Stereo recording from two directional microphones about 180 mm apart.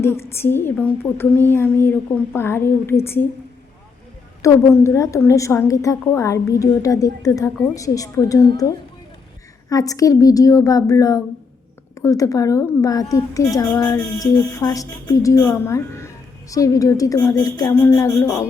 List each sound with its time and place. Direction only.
0.0 s a woman's voice: 15° left (ahead or behind)
4.4 s a woman's voice: 15° left (ahead or behind)
9.6 s a woman's voice: 20° left (ahead or behind)